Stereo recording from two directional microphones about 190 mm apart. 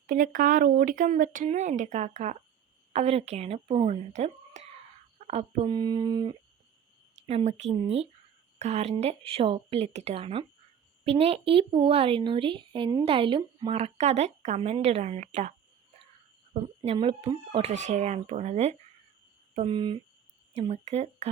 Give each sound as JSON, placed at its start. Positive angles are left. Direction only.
{"t": 0.1, "sound": "a woman's voice", "side_deg": -45}
{"t": 5.6, "sound": "mantra", "side_deg": -25}
{"t": 7.3, "sound": "a woman's voice", "side_deg": -35}
{"t": 16.6, "sound": "a woman's voice", "side_deg": -30}
{"t": 19.5, "sound": "mantra", "side_deg": -25}
{"t": 20.6, "sound": "a woman's voice", "side_deg": -35}